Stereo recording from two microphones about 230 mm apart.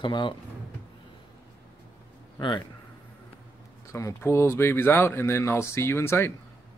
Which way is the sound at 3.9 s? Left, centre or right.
Centre.